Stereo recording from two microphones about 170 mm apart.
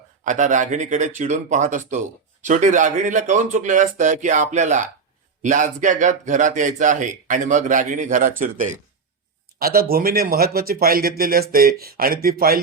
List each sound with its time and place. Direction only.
0.3 s speech: 45° right (ahead or behind)
9.6 s speech: 60° right (ahead or behind)